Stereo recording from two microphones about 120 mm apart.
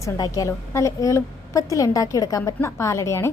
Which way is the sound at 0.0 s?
30° left (ahead or behind).